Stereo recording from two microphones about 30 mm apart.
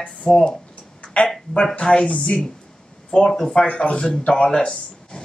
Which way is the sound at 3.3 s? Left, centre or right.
Left.